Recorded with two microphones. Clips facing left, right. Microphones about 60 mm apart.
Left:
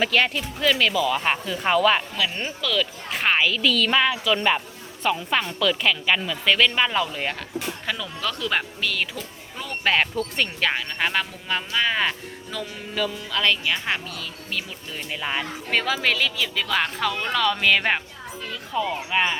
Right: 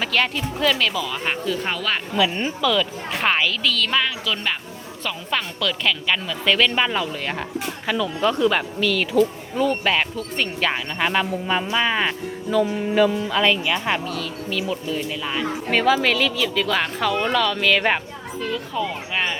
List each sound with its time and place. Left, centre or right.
0.0 s speech: centre
2.1 s speech: centre
8.2 s speech: right
8.4 s speech: centre
13.7 s speech: centre
15.7 s speech: centre